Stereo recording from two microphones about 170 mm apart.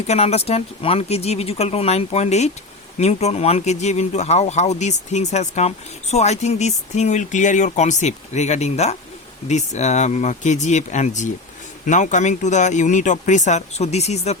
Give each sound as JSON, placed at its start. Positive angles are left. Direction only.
{"t": 0.1, "sound": "speech", "side_deg": 40}